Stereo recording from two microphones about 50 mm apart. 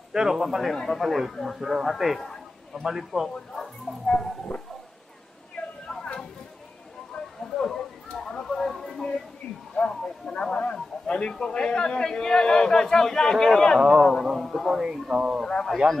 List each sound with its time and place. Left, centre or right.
0.1 s speech: centre
2.1 s a sound: centre
2.8 s speech: centre
3.5 s bow-wow: centre
7.4 s a sound: centre
9.8 s a man's voice: centre
13.7 s speech: centre
14.8 s speech: centre
15.4 s a man's voice: centre